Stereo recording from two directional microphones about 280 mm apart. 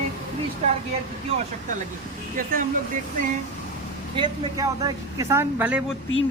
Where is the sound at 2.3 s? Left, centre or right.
Right.